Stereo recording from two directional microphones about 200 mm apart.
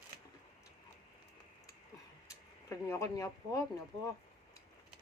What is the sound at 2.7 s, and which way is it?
Speech, 15° left (ahead or behind).